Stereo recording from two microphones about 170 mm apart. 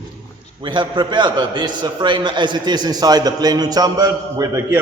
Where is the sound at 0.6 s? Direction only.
30° right (ahead or behind).